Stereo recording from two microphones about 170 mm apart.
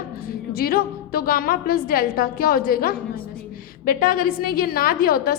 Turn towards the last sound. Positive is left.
turn(degrees=60)  # may be behind; listen again after turning